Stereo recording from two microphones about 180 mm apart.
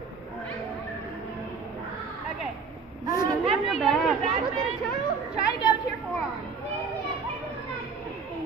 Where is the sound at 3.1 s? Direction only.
20° right (ahead or behind).